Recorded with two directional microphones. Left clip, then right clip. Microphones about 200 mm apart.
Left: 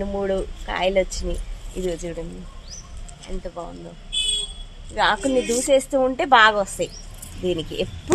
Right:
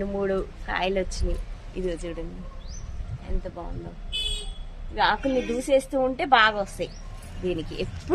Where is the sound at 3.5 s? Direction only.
35° left (ahead or behind).